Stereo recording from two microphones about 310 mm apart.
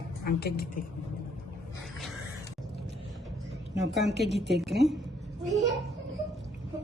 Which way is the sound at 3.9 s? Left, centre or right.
Centre.